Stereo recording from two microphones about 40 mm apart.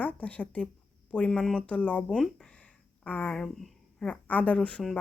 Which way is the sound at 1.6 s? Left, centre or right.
Left.